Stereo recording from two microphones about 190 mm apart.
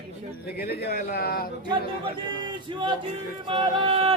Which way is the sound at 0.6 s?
55° left (ahead or behind).